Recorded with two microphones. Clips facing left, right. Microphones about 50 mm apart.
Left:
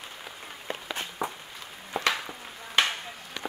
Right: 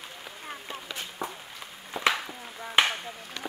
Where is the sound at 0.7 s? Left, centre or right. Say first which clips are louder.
Left 6 dB; left.